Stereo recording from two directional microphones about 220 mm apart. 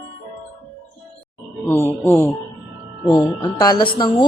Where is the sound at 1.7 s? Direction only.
10° left (ahead or behind).